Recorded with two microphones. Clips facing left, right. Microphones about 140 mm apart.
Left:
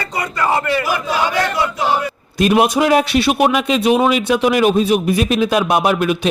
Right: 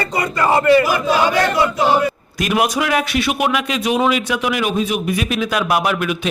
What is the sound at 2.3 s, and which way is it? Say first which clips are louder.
A man's voice: left 6 dB; 30° left (ahead or behind).